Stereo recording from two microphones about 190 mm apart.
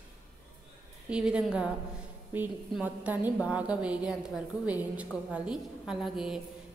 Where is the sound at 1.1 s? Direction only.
5° right (ahead or behind).